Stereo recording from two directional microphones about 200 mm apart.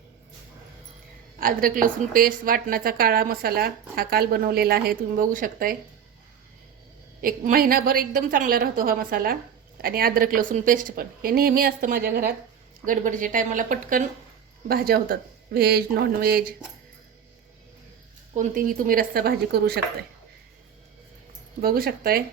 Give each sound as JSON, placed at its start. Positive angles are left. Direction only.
{"t": 1.4, "sound": "a woman's voice", "side_deg": -45}
{"t": 7.2, "sound": "a woman's voice", "side_deg": -45}
{"t": 18.3, "sound": "a woman's voice", "side_deg": -45}
{"t": 21.6, "sound": "a woman's voice", "side_deg": -50}